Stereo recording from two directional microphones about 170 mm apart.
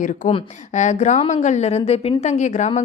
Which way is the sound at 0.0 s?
45° left (ahead or behind).